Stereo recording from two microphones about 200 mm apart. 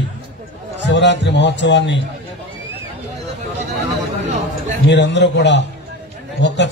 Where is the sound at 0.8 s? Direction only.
60° left (ahead or behind).